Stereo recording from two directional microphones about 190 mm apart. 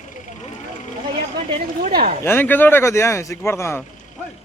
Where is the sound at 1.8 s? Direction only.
50° right (ahead or behind).